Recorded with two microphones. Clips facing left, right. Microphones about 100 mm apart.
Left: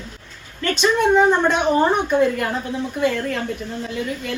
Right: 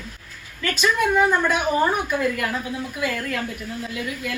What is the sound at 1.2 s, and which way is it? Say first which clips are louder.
Speech: left 4 dB; 25° left (ahead or behind).